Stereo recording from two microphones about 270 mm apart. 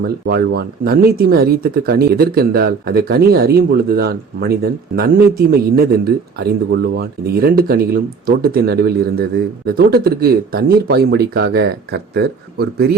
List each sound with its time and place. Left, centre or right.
0.0 s speech: right